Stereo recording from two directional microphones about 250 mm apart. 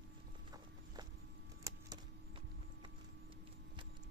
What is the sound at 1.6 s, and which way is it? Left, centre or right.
Vehicle, centre.